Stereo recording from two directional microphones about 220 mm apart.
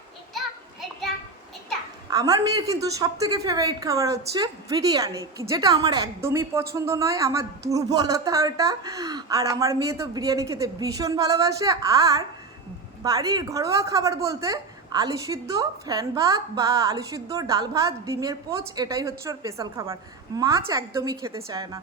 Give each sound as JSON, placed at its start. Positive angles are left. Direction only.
{"t": 0.3, "sound": "children playing", "side_deg": 0}
{"t": 2.0, "sound": "a woman's voice", "side_deg": -15}